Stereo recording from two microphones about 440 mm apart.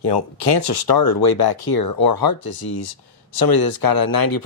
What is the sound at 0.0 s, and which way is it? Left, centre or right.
Speech, left.